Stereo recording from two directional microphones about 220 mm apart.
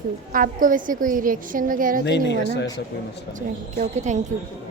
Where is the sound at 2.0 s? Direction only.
50° left (ahead or behind).